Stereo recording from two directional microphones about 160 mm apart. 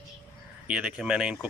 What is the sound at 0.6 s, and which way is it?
Speech, 5° right (ahead or behind).